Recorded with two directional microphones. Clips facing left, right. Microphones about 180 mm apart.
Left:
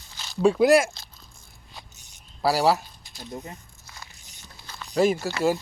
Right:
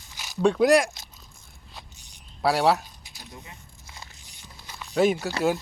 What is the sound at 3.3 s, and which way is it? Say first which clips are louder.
Speech: left 9 dB; 40° left (ahead or behind).